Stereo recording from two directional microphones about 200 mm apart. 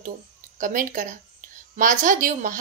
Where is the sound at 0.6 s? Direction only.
40° right (ahead or behind).